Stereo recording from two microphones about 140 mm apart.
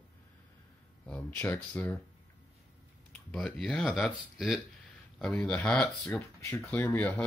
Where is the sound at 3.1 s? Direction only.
Centre (ahead or behind).